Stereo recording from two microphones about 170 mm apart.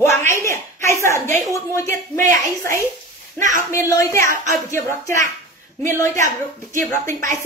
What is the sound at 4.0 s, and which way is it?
Speech, 15° left (ahead or behind).